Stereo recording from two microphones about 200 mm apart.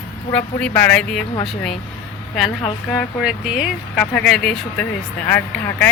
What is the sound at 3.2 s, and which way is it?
A woman's voice, 5° right (ahead or behind).